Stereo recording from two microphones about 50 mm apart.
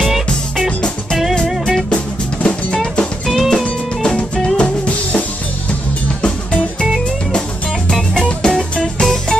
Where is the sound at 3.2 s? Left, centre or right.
Centre.